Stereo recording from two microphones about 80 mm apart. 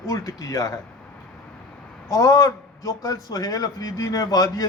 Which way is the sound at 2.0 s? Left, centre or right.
Left.